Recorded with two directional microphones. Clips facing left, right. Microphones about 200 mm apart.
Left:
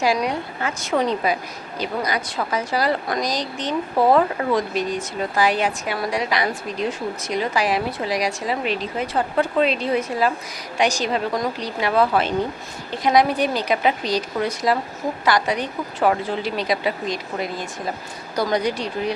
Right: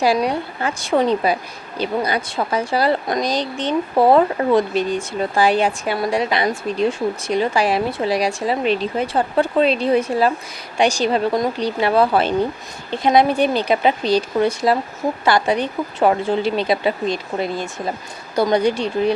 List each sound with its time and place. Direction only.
0.0 s speech: 35° right (ahead or behind)